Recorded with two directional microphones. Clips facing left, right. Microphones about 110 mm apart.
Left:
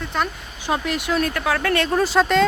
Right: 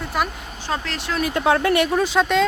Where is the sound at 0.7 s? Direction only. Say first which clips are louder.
Left 4 dB; 15° left (ahead or behind).